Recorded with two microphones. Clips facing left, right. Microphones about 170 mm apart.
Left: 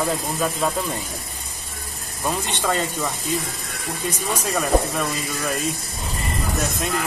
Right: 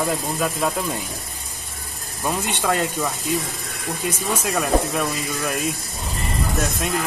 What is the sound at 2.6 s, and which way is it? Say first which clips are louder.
Speech: right 2 dB; centre (ahead or behind).